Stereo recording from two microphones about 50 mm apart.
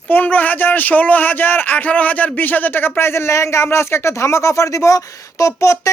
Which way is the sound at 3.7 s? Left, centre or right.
Left.